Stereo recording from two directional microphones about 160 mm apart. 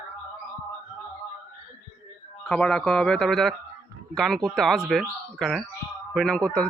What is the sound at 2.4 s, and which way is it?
Speech, 5° left (ahead or behind).